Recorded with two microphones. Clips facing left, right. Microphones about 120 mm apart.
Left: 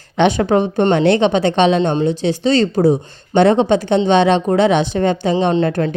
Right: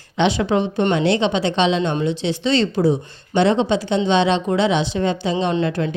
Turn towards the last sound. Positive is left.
turn(degrees=45)  # may be behind; listen again after turning